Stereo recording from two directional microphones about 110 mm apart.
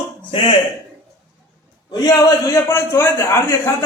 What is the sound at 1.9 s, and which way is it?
A man's voice, 35° left (ahead or behind).